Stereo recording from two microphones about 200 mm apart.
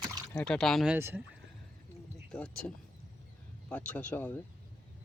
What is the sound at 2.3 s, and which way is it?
Speech, 5° left (ahead or behind).